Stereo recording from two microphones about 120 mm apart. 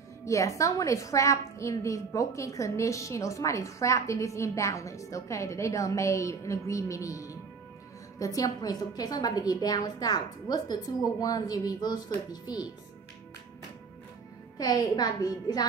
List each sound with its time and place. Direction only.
0.2 s a woman's voice: 25° left (ahead or behind)
14.6 s a woman's voice: 30° left (ahead or behind)